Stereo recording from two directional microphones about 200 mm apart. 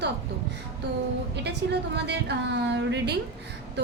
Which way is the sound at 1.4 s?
55° right (ahead or behind).